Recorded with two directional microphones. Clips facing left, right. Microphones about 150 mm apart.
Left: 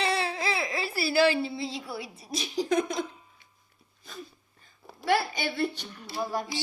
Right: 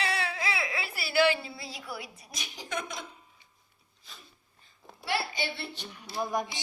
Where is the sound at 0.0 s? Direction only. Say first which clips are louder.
Left 4 dB; 30° left (ahead or behind).